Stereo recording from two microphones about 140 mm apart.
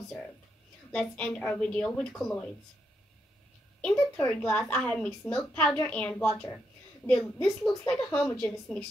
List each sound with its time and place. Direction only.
0.9 s a woman's voice: 5° left (ahead or behind)
3.8 s a woman's voice: 10° left (ahead or behind)